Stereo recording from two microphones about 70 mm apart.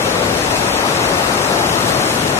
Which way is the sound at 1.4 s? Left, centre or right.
Left.